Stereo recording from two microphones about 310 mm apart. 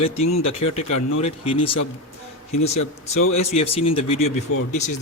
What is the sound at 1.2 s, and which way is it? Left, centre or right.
Speech, centre.